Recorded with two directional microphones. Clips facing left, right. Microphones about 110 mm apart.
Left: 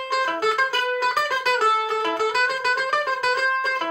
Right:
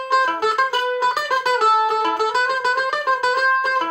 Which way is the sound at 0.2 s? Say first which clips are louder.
Right 3 dB; 15° right (ahead or behind).